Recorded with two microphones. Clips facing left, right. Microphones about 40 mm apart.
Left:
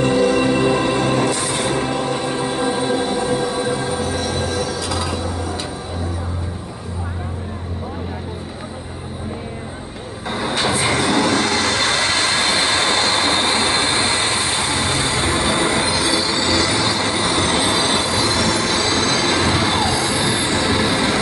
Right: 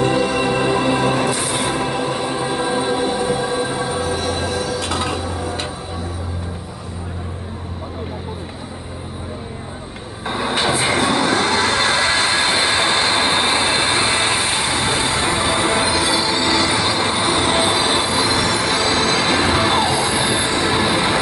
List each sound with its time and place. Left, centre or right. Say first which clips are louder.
0.0 s music: left 2 dB; centre
4.8 s a sound: right 1 dB; right
10.2 s music: right 1 dB; right